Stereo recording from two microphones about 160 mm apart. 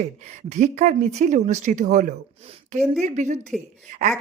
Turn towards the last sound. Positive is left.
turn(degrees=-50)  # may be behind; listen again after turning